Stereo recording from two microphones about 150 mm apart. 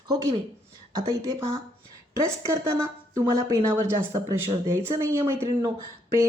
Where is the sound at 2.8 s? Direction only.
20° right (ahead or behind).